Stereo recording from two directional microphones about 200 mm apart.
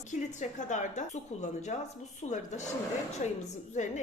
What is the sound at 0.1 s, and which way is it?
A woman's voice, 35° left (ahead or behind).